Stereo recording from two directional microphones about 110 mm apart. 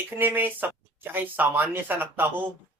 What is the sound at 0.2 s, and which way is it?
Speech, 20° right (ahead or behind).